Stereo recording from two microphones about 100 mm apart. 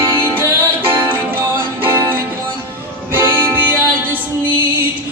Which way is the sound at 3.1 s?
20° right (ahead or behind).